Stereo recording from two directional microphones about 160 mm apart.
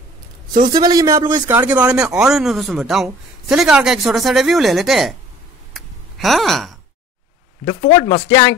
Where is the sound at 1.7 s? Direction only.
10° right (ahead or behind).